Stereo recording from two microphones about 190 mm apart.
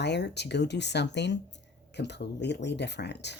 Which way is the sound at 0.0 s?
65° left (ahead or behind).